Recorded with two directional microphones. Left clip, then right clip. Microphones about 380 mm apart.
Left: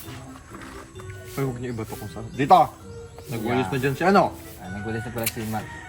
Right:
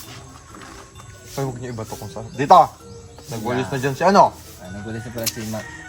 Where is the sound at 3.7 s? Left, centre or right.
Centre.